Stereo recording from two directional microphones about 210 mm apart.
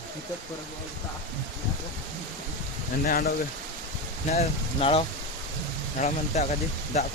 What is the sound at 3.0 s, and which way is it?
Speech, 45° left (ahead or behind).